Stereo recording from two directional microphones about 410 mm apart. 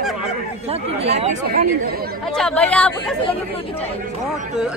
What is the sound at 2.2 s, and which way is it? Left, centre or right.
Speech, centre.